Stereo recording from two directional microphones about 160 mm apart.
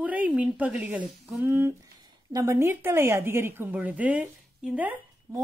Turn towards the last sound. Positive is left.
turn(degrees=-5)  # may be behind; listen again after turning